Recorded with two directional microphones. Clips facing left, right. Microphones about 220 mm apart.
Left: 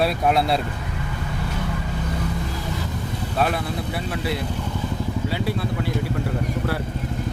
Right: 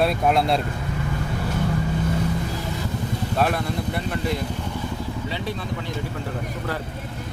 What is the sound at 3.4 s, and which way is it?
Speech, centre (ahead or behind).